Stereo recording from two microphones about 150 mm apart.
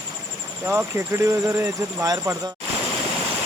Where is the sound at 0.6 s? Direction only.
15° right (ahead or behind).